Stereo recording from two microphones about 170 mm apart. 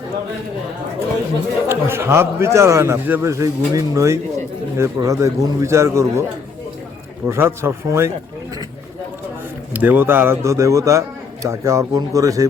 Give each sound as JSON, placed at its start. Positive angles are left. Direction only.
{"t": 1.6, "sound": "a man's voice", "side_deg": -15}
{"t": 7.3, "sound": "a man's voice", "side_deg": -15}
{"t": 9.7, "sound": "a man's voice", "side_deg": -10}